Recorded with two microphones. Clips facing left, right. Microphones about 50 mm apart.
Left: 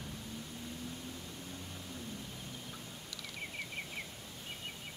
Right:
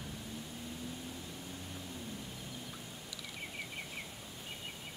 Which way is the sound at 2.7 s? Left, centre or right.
Centre.